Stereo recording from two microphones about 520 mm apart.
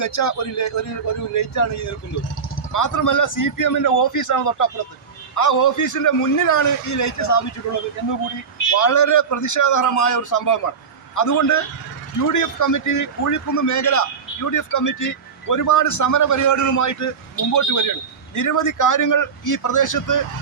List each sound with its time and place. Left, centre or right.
0.0 s speech: left
8.7 s speech: left